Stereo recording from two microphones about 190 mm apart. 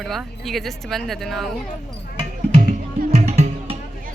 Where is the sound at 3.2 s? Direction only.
35° right (ahead or behind).